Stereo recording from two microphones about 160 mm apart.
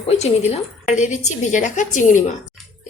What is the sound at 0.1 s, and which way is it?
A woman's voice, 40° left (ahead or behind).